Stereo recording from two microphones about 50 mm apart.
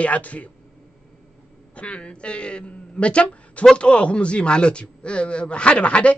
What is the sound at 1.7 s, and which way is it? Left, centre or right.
A man's voice, left.